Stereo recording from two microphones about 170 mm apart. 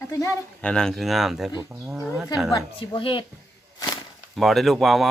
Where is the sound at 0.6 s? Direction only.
5° left (ahead or behind).